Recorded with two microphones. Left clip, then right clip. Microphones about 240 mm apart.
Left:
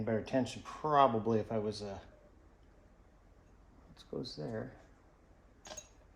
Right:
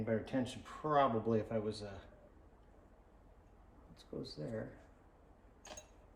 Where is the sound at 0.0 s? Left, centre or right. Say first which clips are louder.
Left 4 dB; left.